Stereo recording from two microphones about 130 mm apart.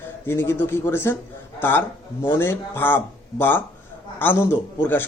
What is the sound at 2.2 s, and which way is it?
Speech, 20° left (ahead or behind).